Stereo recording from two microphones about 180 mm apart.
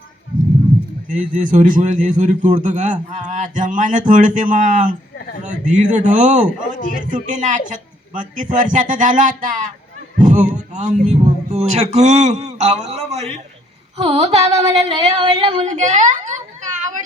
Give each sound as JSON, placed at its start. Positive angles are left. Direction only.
{"t": 1.1, "sound": "a man's voice", "side_deg": -45}
{"t": 6.7, "sound": "a man's voice", "side_deg": 45}
{"t": 7.1, "sound": "a man's voice", "side_deg": -45}
{"t": 15.6, "sound": "a woman's voice", "side_deg": -40}